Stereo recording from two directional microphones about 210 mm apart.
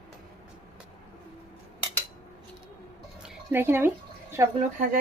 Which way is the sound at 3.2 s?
10° right (ahead or behind).